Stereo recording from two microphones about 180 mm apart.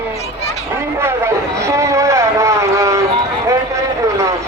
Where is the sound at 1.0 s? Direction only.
15° right (ahead or behind).